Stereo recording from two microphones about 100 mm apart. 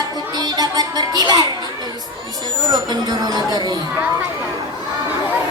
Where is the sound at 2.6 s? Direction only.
40° right (ahead or behind).